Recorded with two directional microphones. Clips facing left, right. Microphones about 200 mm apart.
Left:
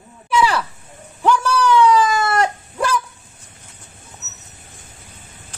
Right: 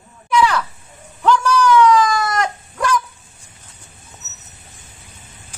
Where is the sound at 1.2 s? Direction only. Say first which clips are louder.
Right 1 dB; 10° left (ahead or behind).